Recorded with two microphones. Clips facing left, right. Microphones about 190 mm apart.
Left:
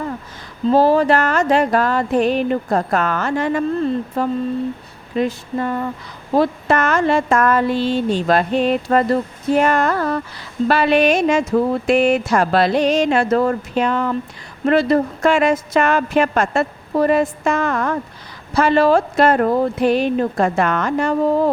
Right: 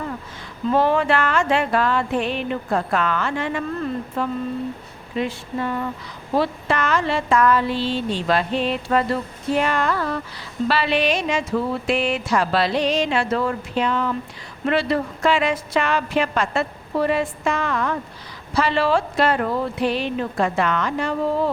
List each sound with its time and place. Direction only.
0.7 s a woman's voice: 35° left (ahead or behind)